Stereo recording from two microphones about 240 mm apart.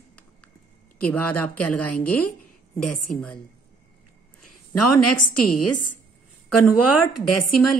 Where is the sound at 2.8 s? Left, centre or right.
Left.